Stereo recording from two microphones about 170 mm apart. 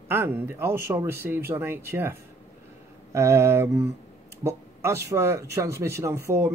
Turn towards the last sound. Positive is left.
turn(degrees=-15)  # may be behind; listen again after turning